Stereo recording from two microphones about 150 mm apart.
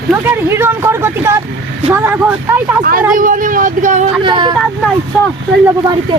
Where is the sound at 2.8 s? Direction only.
70° right (ahead or behind).